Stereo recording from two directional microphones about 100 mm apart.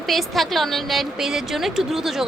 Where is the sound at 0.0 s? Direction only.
Centre (ahead or behind).